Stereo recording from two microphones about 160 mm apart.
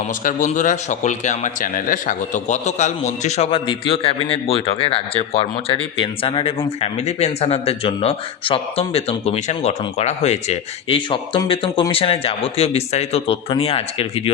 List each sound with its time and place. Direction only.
0.3 s a man's voice: 50° left (ahead or behind)